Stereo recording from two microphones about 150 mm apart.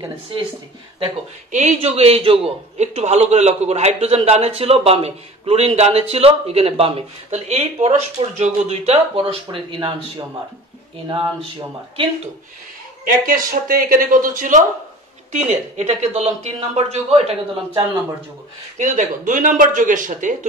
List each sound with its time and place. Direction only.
0.0 s speech: 35° right (ahead or behind)
1.5 s a man's voice: 55° right (ahead or behind); by 9.8 s 40° right (ahead or behind)
13.0 s speech: 70° right (ahead or behind)
15.3 s a man's voice: 50° right (ahead or behind)
18.8 s speech: 60° right (ahead or behind)